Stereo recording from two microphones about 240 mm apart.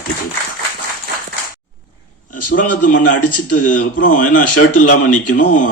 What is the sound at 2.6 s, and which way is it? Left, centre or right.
Speech, left.